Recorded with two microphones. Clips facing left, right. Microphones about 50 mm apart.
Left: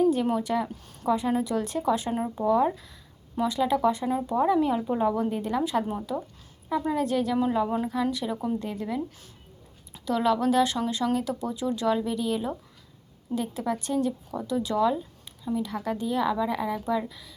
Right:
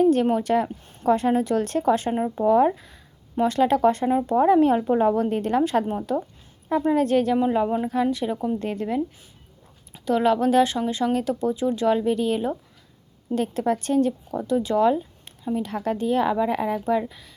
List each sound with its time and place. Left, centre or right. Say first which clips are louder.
0.0 s a sound: right 4 dB; right
0.3 s a woman's voice: right 5 dB; right
2.2 s speech: right 5 dB; right
2.5 s a sound: right 5 dB; right
3.4 s a woman's voice: right 5 dB; right
6.7 s a woman's voice: right 5 dB; right
6.9 s speech: right 7 dB; right
7.3 s speech: right 4 dB; right
8.1 s a woman's voice: right 4 dB; right
10.1 s speech: right 4 dB; right
13.3 s a woman's voice: right 6 dB; right
16.7 s speech: right 5 dB; right